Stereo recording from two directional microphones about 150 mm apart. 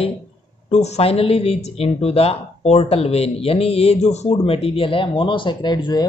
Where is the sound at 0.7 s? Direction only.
45° left (ahead or behind).